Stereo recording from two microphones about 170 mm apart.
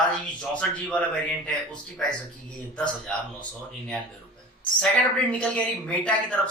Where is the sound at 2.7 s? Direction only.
5° left (ahead or behind).